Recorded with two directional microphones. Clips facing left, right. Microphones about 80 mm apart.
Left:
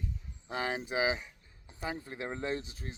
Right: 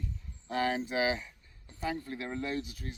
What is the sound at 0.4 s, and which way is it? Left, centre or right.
Speech, centre.